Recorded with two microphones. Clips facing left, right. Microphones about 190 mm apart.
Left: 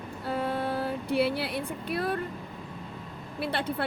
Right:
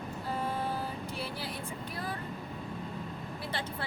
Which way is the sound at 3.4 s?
65° left (ahead or behind).